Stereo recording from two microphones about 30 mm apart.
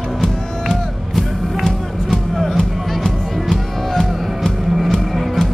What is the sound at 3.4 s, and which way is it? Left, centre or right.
Music, centre.